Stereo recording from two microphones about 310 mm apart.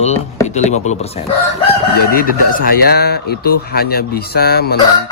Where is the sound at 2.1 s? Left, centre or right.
Left.